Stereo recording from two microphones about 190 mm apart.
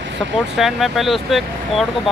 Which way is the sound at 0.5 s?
Centre (ahead or behind).